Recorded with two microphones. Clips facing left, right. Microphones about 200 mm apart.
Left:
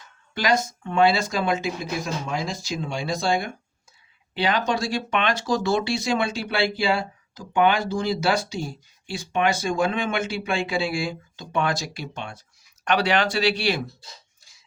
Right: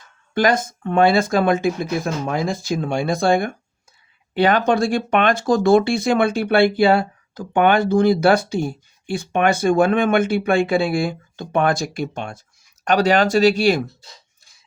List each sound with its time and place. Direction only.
0.3 s speech: 50° right (ahead or behind)